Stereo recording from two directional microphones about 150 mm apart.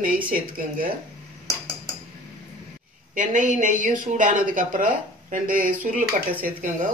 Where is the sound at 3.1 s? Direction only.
60° right (ahead or behind).